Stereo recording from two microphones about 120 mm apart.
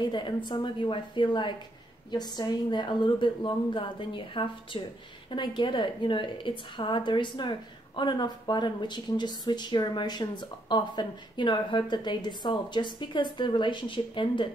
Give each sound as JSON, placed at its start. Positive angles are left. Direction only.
{"t": 0.0, "sound": "a woman's voice", "side_deg": 40}